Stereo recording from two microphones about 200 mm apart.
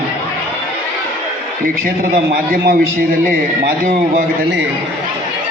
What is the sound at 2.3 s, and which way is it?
A man's voice, 45° right (ahead or behind).